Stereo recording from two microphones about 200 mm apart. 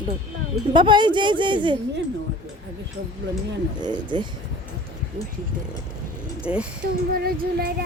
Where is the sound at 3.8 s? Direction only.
20° right (ahead or behind).